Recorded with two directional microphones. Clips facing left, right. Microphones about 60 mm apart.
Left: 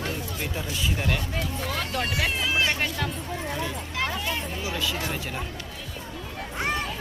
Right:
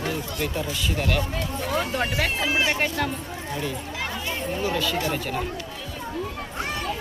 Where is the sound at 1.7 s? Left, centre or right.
Right.